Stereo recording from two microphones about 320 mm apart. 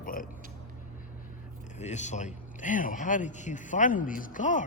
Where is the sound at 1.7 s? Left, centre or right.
Left.